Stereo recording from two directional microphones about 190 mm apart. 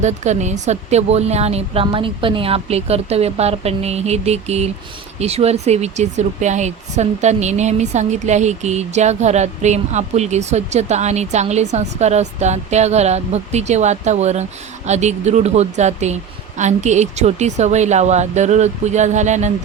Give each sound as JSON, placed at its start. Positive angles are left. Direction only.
{"t": 0.0, "sound": "speech", "side_deg": -35}